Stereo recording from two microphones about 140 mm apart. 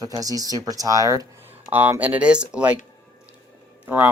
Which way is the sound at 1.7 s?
15° right (ahead or behind).